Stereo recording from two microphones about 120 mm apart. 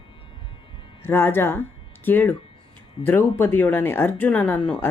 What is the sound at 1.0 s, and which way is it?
A woman's voice, 20° left (ahead or behind).